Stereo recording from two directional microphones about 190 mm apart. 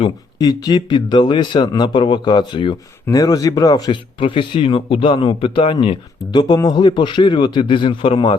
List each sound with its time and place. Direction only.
0.0 s speech: 20° left (ahead or behind)